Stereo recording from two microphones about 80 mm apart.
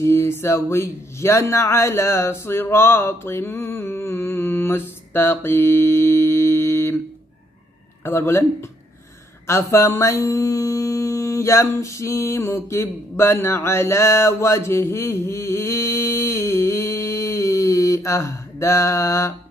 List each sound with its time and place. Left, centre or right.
0.0 s speech: left
8.0 s speech: left
9.5 s music: left